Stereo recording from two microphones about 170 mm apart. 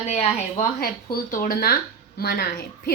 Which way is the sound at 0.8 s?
55° left (ahead or behind).